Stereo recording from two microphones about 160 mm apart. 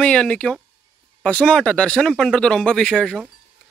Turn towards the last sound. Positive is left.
turn(degrees=5)  # may be behind; listen again after turning